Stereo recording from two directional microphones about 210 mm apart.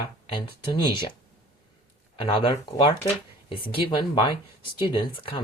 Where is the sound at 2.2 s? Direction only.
25° left (ahead or behind).